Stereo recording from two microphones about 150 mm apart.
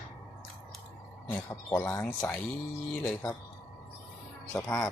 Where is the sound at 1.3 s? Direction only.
15° left (ahead or behind).